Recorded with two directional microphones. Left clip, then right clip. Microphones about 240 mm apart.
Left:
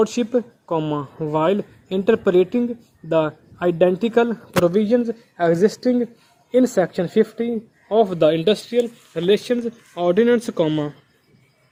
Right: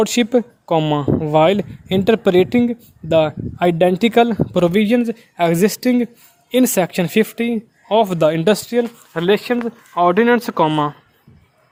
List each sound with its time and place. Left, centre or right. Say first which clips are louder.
0.0 s speech: right 4 dB; right
4.7 s a man's voice: right 2 dB; right
5.4 s speech: right 1 dB; right
9.1 s speech: right 2 dB; centre